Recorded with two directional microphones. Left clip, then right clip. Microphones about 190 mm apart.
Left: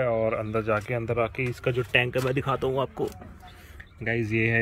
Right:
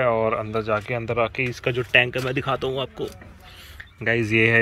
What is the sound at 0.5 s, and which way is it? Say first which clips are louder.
Speech: right 2 dB; 15° left (ahead or behind).